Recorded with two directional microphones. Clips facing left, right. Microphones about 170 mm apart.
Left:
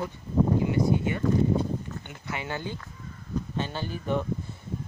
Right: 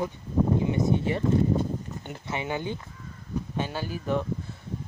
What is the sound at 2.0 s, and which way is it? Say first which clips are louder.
Speech: right 3 dB; 30° right (ahead or behind).